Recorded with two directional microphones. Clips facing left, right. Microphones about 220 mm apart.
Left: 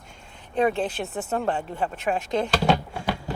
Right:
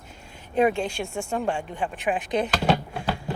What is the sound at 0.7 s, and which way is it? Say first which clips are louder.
Speech: left 1 dB; centre (ahead or behind).